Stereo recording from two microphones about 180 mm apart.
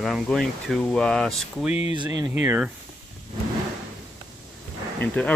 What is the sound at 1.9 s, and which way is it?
Speech, 20° right (ahead or behind).